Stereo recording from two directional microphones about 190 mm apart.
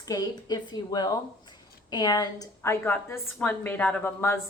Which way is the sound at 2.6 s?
10° left (ahead or behind).